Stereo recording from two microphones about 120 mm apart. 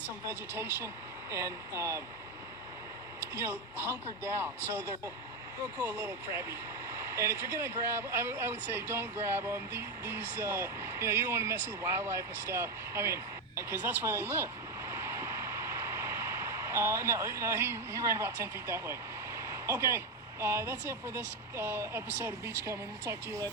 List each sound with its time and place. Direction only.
0.3 s speech: 20° right (ahead or behind)
3.3 s speech: 20° right (ahead or behind)
13.6 s vehicle: 20° right (ahead or behind)
20.4 s speech: 20° right (ahead or behind)